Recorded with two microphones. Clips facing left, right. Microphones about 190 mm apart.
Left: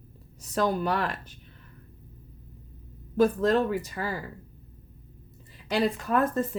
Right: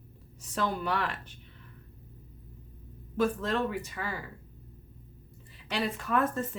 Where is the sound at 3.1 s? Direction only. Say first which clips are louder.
Left 6 dB; 40° left (ahead or behind).